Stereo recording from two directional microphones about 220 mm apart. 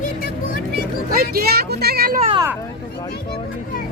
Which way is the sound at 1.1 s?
45° right (ahead or behind).